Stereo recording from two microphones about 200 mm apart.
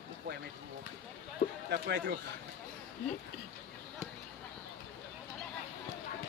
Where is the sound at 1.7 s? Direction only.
55° right (ahead or behind).